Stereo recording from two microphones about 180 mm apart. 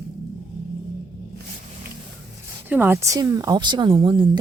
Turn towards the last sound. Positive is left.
turn(degrees=-30)  # may be behind; listen again after turning